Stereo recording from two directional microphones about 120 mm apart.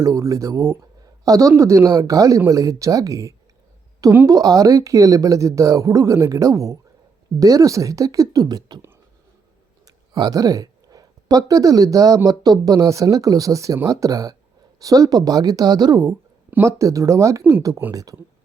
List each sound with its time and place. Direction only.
0.0 s a woman's voice: 25° right (ahead or behind)
9.8 s a woman's voice: 35° right (ahead or behind)